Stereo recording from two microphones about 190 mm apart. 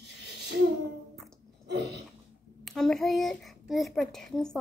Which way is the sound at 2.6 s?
Centre (ahead or behind).